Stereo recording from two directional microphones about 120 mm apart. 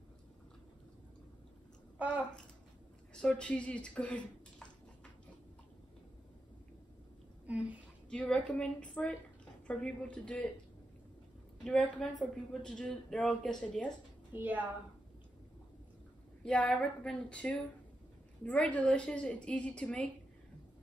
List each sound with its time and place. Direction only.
2.0 s a woman's voice: 10° right (ahead or behind)
3.2 s speech: 10° left (ahead or behind)
7.4 s speech: 10° right (ahead or behind)
8.1 s a woman's voice: 10° left (ahead or behind)
11.6 s speech: 5° left (ahead or behind)
14.3 s a woman's voice: 15° right (ahead or behind)
16.4 s a woman's voice: 10° left (ahead or behind)